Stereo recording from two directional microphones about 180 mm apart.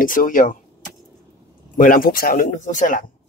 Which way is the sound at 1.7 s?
50° left (ahead or behind).